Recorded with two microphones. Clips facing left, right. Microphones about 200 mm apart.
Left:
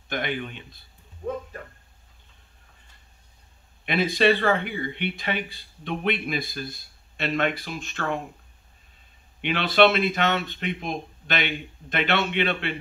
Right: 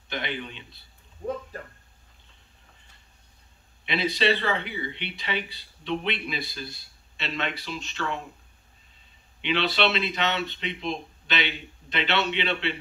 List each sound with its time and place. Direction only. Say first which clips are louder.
0.1 s speech: left 4 dB; 50° left (ahead or behind)
3.8 s speech: left 4 dB; 50° left (ahead or behind)
9.4 s speech: left 5 dB; 50° left (ahead or behind)